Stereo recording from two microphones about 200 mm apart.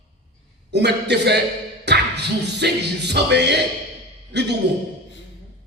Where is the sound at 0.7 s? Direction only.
55° right (ahead or behind).